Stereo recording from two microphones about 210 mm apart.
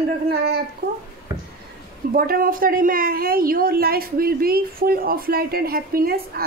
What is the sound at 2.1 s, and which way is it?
A woman's voice, 45° right (ahead or behind).